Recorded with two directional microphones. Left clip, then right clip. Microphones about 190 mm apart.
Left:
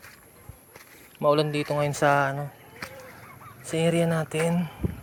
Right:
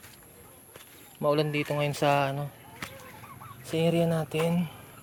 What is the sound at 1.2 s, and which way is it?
Speech, 10° left (ahead or behind).